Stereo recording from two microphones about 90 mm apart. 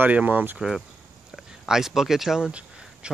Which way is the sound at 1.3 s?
5° right (ahead or behind).